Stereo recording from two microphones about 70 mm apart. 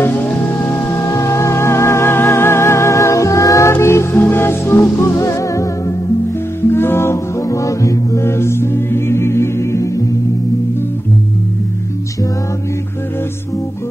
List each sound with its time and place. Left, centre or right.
0.6 s music: left
1.1 s music: left
5.1 s music: left
6.7 s music: left